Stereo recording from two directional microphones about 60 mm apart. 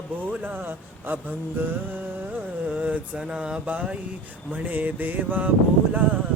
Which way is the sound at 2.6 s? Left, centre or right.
Right.